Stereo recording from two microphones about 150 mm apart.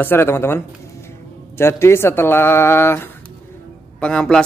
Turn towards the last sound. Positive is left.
turn(degrees=5)  # may be behind; listen again after turning